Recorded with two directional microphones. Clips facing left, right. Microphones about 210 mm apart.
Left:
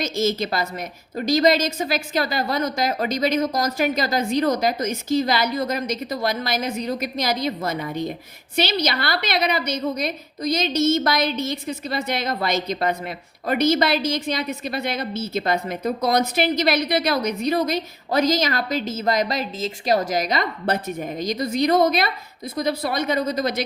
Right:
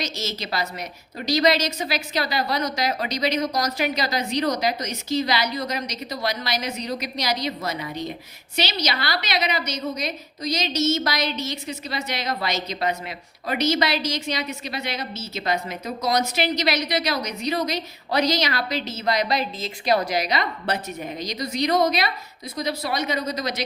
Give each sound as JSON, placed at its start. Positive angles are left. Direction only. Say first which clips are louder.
{"t": 0.0, "sound": "a woman's voice", "louder": "left 8 dB", "side_deg": 50}